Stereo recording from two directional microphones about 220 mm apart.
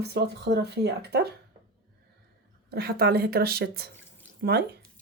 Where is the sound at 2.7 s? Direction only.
45° right (ahead or behind).